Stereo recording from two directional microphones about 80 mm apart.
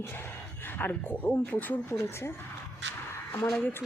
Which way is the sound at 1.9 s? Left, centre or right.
Left.